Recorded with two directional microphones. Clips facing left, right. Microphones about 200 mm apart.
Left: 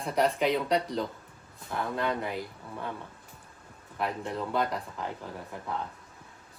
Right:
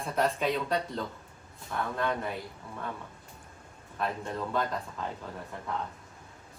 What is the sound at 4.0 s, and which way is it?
Speech, 15° left (ahead or behind).